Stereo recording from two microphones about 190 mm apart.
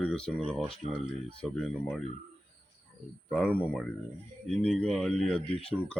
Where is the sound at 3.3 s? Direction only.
5° left (ahead or behind).